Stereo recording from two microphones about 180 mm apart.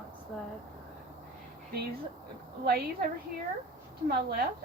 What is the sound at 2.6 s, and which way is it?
Speech, 60° right (ahead or behind).